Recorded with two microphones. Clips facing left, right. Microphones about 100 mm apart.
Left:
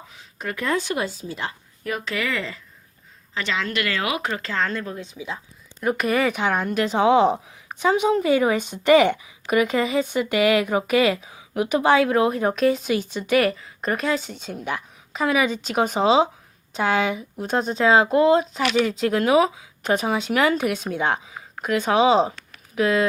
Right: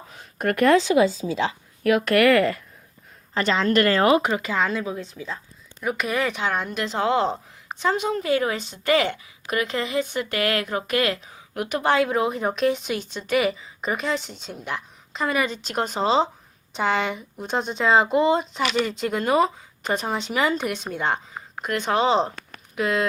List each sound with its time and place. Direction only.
0.1 s a sound: 50° right (ahead or behind); by 0.9 s 80° right
1.4 s speech: 90° right; by 2.6 s 60° right (ahead or behind)
3.3 s speech: 40° right (ahead or behind)
4.2 s speech: 15° right (ahead or behind)
5.0 s a woman's voice: 10° left (ahead or behind)